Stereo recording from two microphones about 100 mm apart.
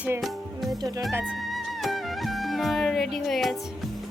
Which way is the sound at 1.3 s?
Centre (ahead or behind).